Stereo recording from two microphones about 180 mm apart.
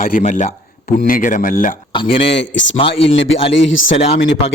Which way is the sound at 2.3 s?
85° left.